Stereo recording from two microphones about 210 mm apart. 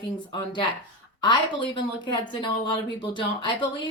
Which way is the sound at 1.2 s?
20° left (ahead or behind).